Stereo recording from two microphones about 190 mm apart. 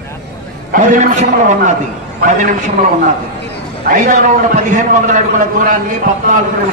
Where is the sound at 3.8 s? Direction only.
45° right (ahead or behind).